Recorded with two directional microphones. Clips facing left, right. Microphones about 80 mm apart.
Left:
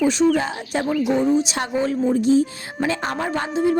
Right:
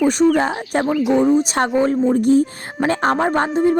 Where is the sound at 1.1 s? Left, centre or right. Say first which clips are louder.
Right 5 dB; right.